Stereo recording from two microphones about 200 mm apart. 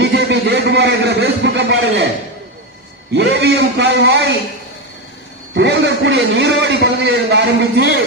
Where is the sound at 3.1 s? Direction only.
55° right (ahead or behind).